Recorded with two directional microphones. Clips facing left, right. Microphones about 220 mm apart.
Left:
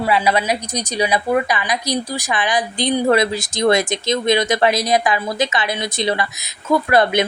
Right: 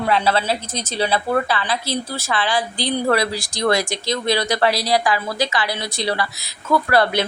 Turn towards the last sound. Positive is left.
turn(degrees=20)  # may be behind; listen again after turning